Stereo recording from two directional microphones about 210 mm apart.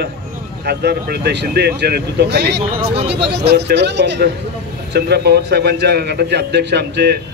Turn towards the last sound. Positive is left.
turn(degrees=-50)  # may be behind; listen again after turning